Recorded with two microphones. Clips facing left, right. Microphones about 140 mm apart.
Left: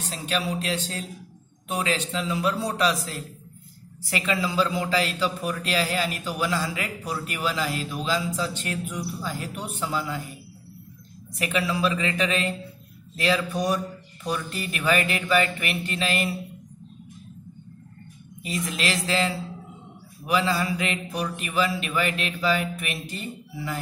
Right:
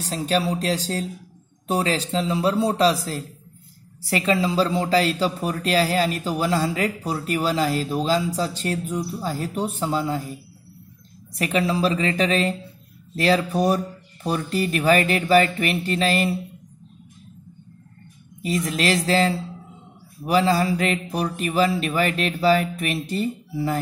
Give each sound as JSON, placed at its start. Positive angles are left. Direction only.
{"t": 0.0, "sound": "a man's voice", "side_deg": -35}
{"t": 11.3, "sound": "a man's voice", "side_deg": -35}
{"t": 18.4, "sound": "a man's voice", "side_deg": -35}